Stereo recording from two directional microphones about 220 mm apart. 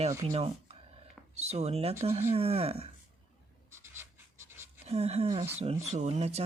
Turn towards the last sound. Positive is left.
turn(degrees=-30)  # may be behind; listen again after turning